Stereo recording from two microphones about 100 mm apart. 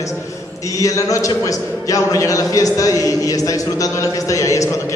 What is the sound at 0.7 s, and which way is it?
A man's voice, 35° left (ahead or behind).